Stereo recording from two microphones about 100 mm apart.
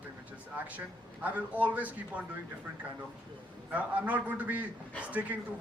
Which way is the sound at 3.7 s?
15° right (ahead or behind).